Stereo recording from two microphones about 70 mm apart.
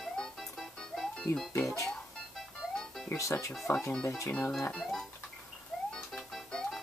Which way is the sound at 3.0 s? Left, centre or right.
Left.